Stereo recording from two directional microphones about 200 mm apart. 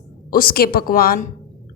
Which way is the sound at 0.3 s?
45° left (ahead or behind).